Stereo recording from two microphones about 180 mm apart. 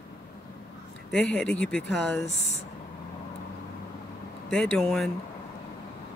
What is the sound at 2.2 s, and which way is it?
Speech, 35° left (ahead or behind).